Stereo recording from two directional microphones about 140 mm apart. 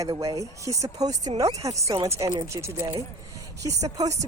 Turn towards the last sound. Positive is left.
turn(degrees=-25)  # may be behind; listen again after turning